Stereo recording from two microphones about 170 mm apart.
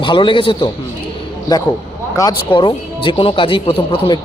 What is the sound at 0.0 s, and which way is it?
A man's voice, 30° left (ahead or behind).